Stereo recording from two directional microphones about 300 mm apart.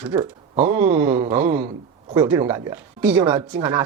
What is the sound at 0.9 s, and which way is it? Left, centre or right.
Speech, right.